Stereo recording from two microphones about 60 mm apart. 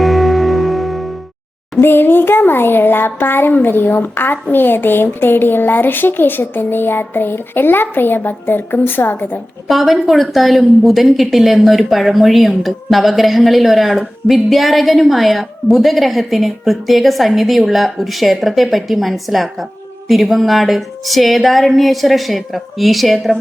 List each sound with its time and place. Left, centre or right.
0.0 s music: centre
1.8 s speech: left
9.6 s a woman's voice: centre